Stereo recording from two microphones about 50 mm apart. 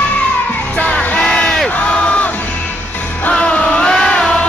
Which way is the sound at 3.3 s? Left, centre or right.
Left.